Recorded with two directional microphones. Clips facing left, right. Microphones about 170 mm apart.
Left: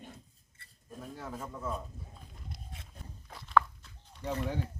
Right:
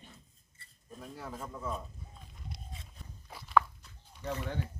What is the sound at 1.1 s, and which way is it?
Speech, centre (ahead or behind).